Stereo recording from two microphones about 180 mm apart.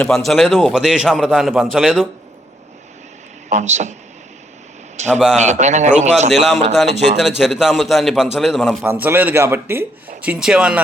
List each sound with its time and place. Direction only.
0.0 s a man's voice: centre (ahead or behind)
3.5 s a man's voice: 40° right (ahead or behind)
5.1 s a man's voice: 5° right (ahead or behind)
5.4 s a man's voice: 40° right (ahead or behind)
6.3 s a man's voice: centre (ahead or behind)
8.8 s a man's voice: 10° right (ahead or behind)